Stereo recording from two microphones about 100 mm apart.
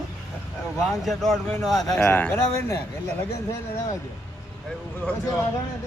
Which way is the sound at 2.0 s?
15° left (ahead or behind).